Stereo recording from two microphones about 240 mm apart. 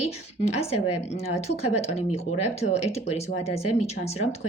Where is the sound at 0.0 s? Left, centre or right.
Left.